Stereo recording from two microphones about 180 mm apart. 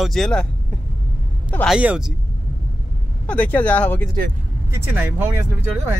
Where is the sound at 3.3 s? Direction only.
10° left (ahead or behind).